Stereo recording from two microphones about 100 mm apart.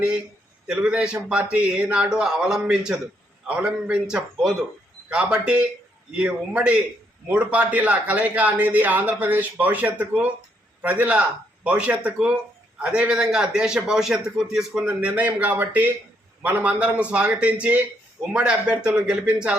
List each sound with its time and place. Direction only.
0.7 s speech: 10° right (ahead or behind)